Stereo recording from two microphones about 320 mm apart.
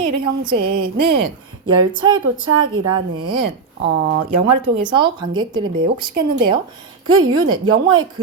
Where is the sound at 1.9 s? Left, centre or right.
Centre.